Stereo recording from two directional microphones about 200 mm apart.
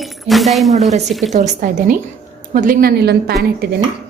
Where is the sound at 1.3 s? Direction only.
35° right (ahead or behind); by 3.3 s 55° right (ahead or behind).